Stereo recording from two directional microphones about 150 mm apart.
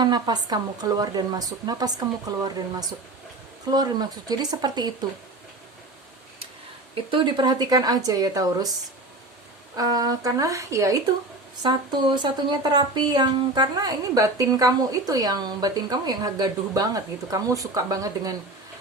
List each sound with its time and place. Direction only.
0.0 s speech: 30° right (ahead or behind)
6.9 s speech: 35° right (ahead or behind)
9.7 s speech: 25° right (ahead or behind)